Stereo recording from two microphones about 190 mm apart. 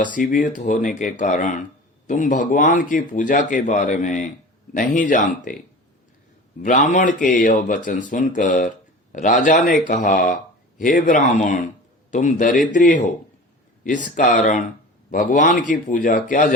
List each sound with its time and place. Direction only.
0.0 s speech: 45° left (ahead or behind)
6.6 s speech: 40° left (ahead or behind)